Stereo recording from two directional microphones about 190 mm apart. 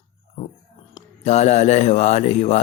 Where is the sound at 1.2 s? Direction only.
35° left (ahead or behind).